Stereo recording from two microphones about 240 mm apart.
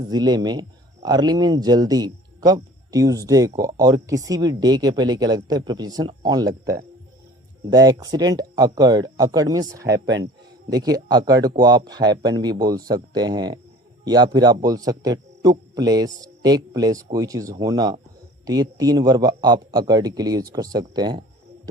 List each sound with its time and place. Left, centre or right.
0.1 s speech: centre